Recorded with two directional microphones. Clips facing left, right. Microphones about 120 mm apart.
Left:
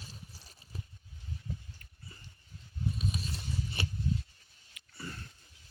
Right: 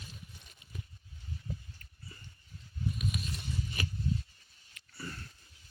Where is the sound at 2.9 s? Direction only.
30° left (ahead or behind).